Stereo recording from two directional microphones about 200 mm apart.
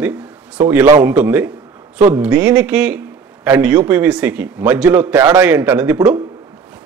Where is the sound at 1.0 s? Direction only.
5° right (ahead or behind).